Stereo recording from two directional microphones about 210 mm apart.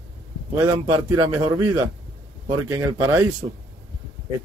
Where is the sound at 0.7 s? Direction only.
15° right (ahead or behind).